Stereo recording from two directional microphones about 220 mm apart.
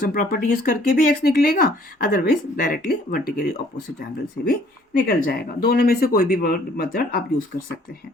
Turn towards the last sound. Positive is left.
turn(degrees=45)  # may be behind; listen again after turning